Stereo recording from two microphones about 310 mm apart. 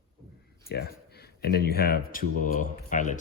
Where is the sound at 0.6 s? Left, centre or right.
Left.